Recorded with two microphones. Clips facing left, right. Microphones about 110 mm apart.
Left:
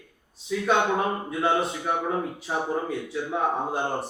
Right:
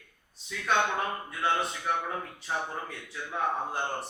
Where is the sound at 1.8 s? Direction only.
15° left (ahead or behind).